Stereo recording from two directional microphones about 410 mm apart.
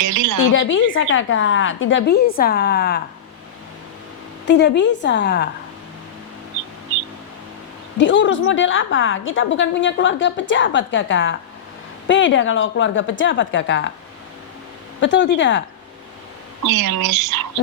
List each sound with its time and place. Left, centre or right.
0.0 s a sound: right
0.5 s a woman's voice: left
4.4 s a woman's voice: left
7.9 s a woman's voice: left
15.0 s a woman's voice: left
16.6 s speech: right